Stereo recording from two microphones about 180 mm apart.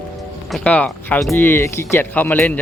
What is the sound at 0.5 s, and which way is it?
Speech, 5° left (ahead or behind).